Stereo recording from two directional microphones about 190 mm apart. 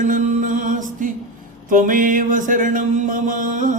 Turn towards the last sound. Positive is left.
turn(degrees=-45)  # may be behind; listen again after turning